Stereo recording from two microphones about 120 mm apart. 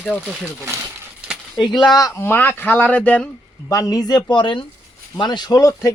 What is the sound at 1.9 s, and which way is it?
Speech, 25° left (ahead or behind).